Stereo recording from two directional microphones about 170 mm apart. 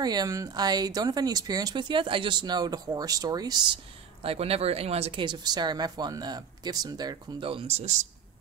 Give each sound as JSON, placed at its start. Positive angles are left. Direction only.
{"t": 0.0, "sound": "speech", "side_deg": -25}